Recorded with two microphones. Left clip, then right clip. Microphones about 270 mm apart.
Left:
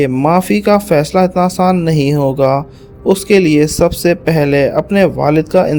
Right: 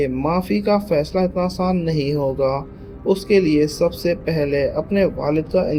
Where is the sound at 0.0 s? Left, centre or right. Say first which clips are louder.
Left 9 dB; left.